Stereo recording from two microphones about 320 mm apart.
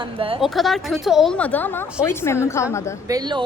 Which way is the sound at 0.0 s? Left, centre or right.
Centre.